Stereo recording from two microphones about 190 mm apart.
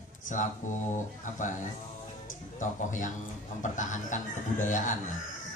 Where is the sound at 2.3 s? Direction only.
40° left (ahead or behind).